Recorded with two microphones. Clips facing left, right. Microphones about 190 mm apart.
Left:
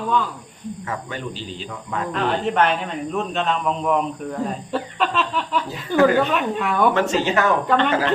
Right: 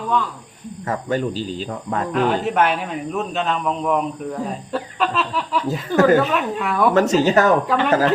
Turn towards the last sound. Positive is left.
turn(degrees=0)  # may be behind; listen again after turning